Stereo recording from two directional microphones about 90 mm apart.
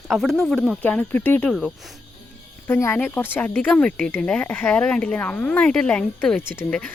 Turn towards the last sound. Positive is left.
turn(degrees=20)  # may be behind; listen again after turning